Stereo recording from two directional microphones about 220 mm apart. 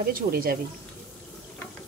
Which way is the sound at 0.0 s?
45° right (ahead or behind).